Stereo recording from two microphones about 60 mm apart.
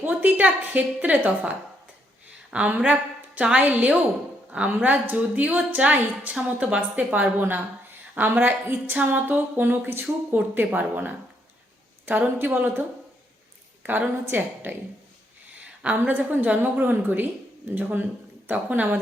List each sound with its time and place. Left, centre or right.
0.0 s a woman's voice: right
7.1 s speech: right
13.8 s speech: right
15.8 s a woman's voice: right